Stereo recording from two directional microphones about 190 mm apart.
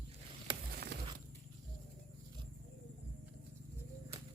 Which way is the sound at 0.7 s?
60° right (ahead or behind).